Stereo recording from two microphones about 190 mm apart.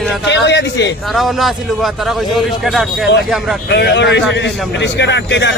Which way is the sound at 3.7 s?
60° left (ahead or behind).